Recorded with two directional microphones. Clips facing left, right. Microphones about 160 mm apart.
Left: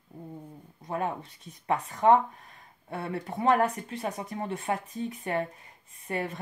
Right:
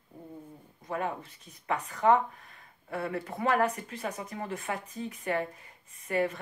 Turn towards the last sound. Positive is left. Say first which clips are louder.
# right 3 dB
turn(degrees=30)  # may be behind; listen again after turning